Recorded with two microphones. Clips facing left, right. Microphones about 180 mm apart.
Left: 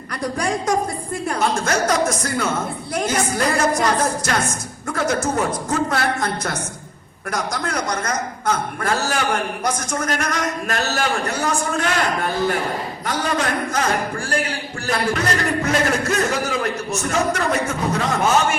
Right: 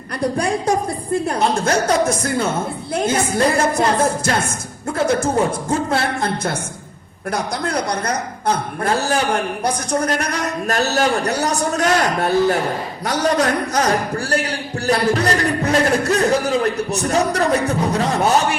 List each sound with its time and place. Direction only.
0.2 s a man's voice: 30° right (ahead or behind)